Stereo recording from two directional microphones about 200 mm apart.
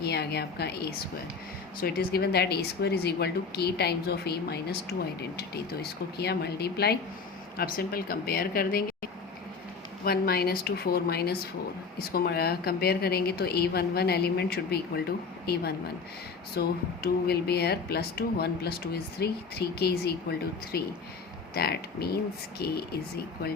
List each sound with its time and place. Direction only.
0.0 s a woman's voice: 55° left (ahead or behind)
10.0 s speech: 50° left (ahead or behind)
16.6 s speech: 50° left (ahead or behind)
21.5 s speech: 50° left (ahead or behind)